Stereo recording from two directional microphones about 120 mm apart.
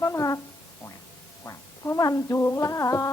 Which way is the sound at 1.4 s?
25° left (ahead or behind).